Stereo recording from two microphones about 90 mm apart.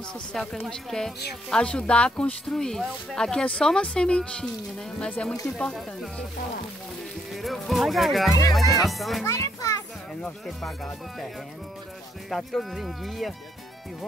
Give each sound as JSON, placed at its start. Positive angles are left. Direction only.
{"t": 0.3, "sound": "speech", "side_deg": 5}
{"t": 7.4, "sound": "speech", "side_deg": 0}
{"t": 9.2, "sound": "children playing", "side_deg": 40}
{"t": 10.2, "sound": "speech", "side_deg": 5}
{"t": 12.3, "sound": "speech", "side_deg": 5}